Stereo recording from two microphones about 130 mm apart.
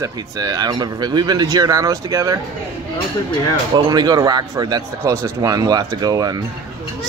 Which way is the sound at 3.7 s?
30° right (ahead or behind).